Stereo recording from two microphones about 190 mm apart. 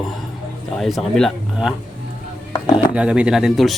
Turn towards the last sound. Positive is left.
turn(degrees=0)  # may be behind; listen again after turning